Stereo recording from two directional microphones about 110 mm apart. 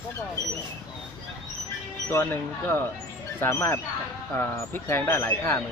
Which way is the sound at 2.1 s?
20° left (ahead or behind).